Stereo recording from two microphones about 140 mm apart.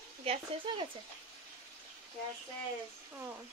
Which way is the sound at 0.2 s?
45° right (ahead or behind).